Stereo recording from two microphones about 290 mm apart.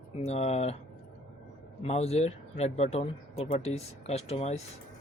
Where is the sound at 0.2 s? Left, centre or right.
Left.